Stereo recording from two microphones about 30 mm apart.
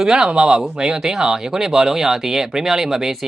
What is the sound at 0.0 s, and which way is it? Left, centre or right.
Speech, right.